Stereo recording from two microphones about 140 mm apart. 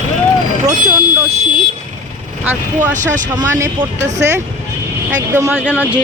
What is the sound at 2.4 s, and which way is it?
Speech, 10° right (ahead or behind).